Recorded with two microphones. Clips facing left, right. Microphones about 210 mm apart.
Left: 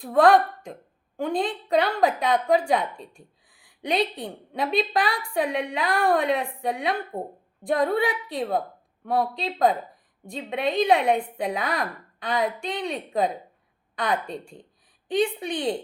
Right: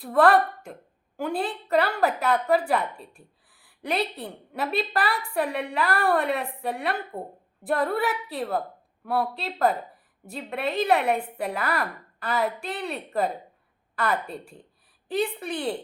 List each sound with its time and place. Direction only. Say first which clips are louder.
0.0 s a woman's voice: left 2 dB; 5° right (ahead or behind)